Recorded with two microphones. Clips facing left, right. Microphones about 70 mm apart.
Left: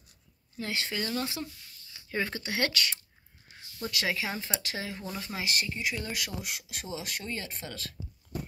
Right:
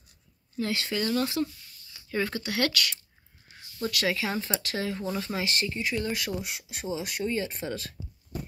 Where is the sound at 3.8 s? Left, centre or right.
Centre.